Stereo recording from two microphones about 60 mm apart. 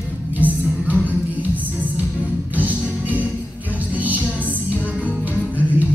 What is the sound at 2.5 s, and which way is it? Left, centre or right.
Music, right.